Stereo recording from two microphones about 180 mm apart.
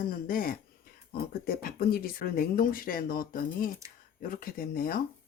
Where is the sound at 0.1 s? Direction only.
55° left (ahead or behind).